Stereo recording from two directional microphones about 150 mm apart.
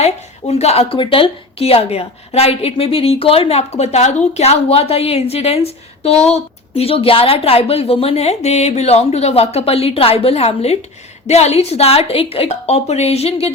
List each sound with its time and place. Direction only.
0.0 s a woman's voice: 45° left (ahead or behind)